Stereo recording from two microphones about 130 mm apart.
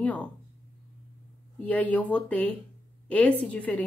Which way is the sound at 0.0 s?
10° left (ahead or behind).